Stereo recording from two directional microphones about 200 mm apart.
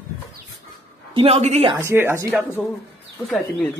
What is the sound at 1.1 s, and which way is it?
Speech, 30° right (ahead or behind).